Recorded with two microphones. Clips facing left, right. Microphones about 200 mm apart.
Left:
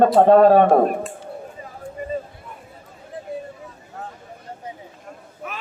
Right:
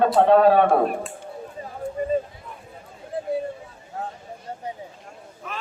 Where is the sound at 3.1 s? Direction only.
35° right (ahead or behind).